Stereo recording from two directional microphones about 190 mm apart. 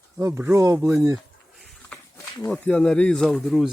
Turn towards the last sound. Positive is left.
turn(degrees=0)  # may be behind; listen again after turning